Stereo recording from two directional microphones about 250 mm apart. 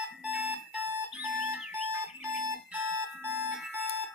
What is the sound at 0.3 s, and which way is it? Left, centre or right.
Alarm clock, centre.